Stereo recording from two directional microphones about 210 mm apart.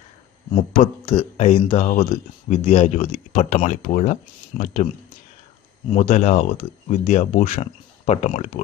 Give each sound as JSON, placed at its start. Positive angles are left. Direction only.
{"t": 0.7, "sound": "speech", "side_deg": 30}
{"t": 5.9, "sound": "speech", "side_deg": 35}